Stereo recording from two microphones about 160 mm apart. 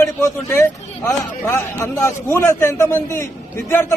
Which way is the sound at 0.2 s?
15° left (ahead or behind).